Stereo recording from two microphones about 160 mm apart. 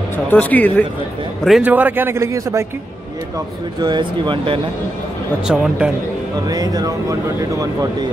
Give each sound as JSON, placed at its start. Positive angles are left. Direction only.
{"t": 0.3, "sound": "speech", "side_deg": 10}
{"t": 1.4, "sound": "a man's voice", "side_deg": -5}
{"t": 3.8, "sound": "speech", "side_deg": -30}
{"t": 5.5, "sound": "a man's voice", "side_deg": -5}
{"t": 6.5, "sound": "speech", "side_deg": -25}